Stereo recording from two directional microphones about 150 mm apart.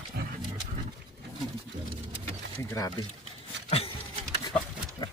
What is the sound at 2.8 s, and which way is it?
Speech, 20° left (ahead or behind).